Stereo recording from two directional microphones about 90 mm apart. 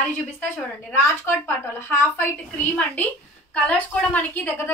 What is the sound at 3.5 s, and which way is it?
A woman's voice, 15° left (ahead or behind).